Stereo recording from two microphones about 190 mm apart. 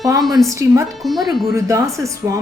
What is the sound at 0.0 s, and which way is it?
Speech, 20° right (ahead or behind).